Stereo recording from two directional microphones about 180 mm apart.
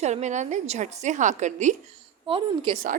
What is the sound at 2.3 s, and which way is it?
Speech, 30° right (ahead or behind).